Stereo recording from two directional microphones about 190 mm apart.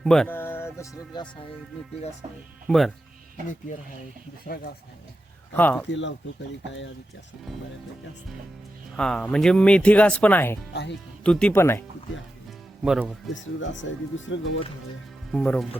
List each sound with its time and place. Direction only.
0.0 s speech: 5° left (ahead or behind); by 1.3 s 20° left (ahead or behind)
2.6 s speech: centre (ahead or behind)
5.5 s speech: 10° left (ahead or behind)
5.9 s speech: 75° left (ahead or behind)
9.0 s speech: 5° left (ahead or behind)
12.8 s speech: 5° right (ahead or behind)
13.9 s speech: 90° left
15.3 s speech: 5° left (ahead or behind)